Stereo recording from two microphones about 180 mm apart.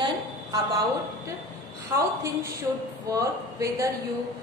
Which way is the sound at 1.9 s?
20° right (ahead or behind).